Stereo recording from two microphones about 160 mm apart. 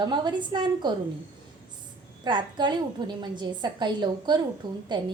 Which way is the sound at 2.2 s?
30° right (ahead or behind).